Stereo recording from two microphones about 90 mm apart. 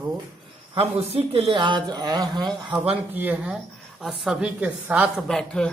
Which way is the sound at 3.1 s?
20° right (ahead or behind).